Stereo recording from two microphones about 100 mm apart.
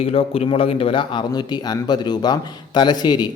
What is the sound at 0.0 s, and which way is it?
A man's voice, 75° left (ahead or behind).